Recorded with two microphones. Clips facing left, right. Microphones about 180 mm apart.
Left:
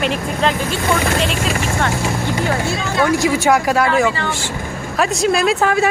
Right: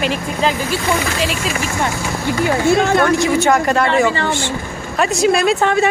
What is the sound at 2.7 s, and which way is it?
Speech, 50° right (ahead or behind).